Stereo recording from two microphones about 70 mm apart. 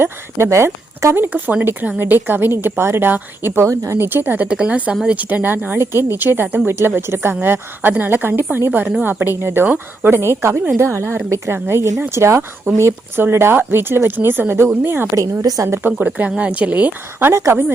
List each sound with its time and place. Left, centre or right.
0.0 s speech: right
1.1 s speech: right
4.4 s a woman's voice: centre; by 15.0 s right
15.1 s a woman's voice: right
15.6 s speech: right
15.9 s speech: right
17.3 s a woman's voice: right